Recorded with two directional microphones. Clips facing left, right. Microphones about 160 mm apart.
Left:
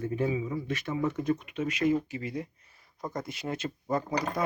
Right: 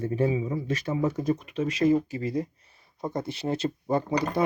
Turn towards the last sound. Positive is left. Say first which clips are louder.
# right 5 dB
turn(degrees=-30)  # may be behind; listen again after turning